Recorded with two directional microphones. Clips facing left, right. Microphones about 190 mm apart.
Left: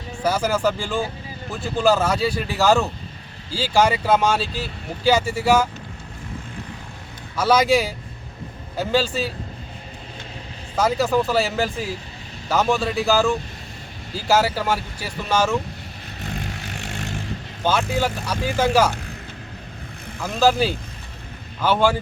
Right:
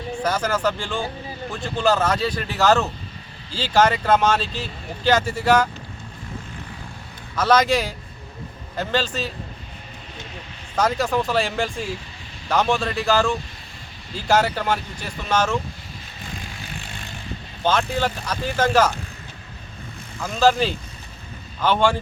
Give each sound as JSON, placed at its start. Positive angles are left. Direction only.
{"t": 0.2, "sound": "speech", "side_deg": 10}
{"t": 7.3, "sound": "speech", "side_deg": 10}
{"t": 10.8, "sound": "speech", "side_deg": 5}
{"t": 16.2, "sound": "vehicle", "side_deg": 65}
{"t": 17.6, "sound": "speech", "side_deg": 10}
{"t": 20.2, "sound": "speech", "side_deg": 5}